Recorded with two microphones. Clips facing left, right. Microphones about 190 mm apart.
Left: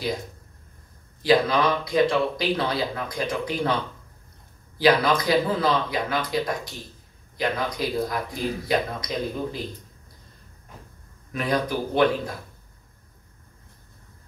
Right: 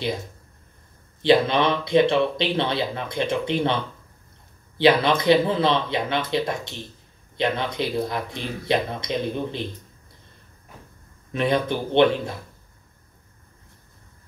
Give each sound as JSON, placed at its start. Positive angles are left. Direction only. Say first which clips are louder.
{"t": 1.2, "sound": "speech", "louder": "right 2 dB", "side_deg": -25}
{"t": 4.7, "sound": "speech", "louder": "right 2 dB", "side_deg": -25}
{"t": 11.3, "sound": "speech", "louder": "right 3 dB", "side_deg": -25}